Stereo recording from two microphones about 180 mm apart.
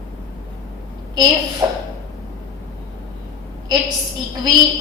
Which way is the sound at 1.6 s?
20° right (ahead or behind).